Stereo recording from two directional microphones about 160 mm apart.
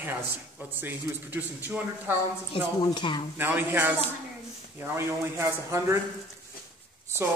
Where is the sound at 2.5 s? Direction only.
30° left (ahead or behind).